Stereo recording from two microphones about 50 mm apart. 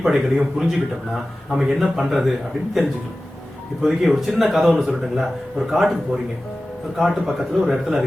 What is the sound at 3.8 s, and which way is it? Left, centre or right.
A man's voice, centre.